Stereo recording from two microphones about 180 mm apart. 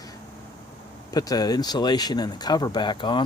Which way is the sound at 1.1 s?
20° left (ahead or behind).